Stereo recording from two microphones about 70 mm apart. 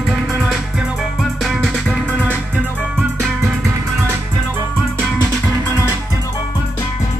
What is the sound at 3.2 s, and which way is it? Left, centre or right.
Music, centre.